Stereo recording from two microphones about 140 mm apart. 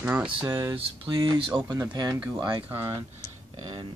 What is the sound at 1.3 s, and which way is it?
Speech, 40° right (ahead or behind).